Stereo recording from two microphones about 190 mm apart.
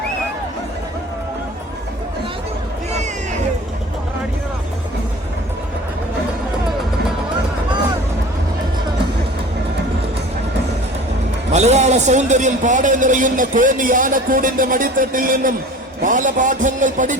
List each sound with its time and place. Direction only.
11.5 s a man's voice: 35° right (ahead or behind)